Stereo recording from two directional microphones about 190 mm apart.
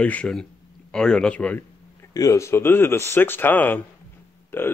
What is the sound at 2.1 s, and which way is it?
Speech, 15° left (ahead or behind).